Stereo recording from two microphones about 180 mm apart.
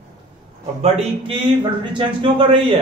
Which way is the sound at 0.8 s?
35° right (ahead or behind).